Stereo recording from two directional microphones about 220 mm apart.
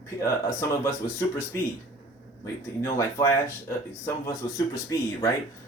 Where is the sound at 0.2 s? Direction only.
15° left (ahead or behind).